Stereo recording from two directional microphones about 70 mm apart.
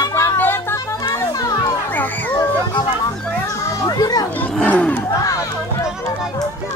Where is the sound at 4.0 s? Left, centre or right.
Left.